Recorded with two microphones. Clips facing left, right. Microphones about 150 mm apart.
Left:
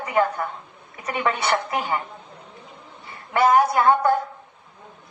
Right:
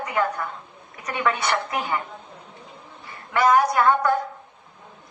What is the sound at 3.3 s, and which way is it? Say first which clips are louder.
Speech: left 1 dB; 30° left (ahead or behind).